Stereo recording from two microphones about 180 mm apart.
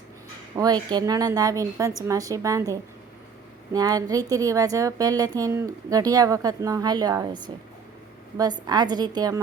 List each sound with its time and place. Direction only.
0.5 s speech: 20° right (ahead or behind)